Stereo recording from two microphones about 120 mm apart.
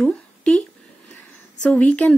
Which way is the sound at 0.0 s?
5° left (ahead or behind).